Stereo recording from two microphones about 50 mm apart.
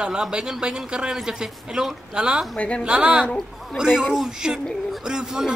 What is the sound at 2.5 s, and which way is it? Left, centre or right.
Speech, left.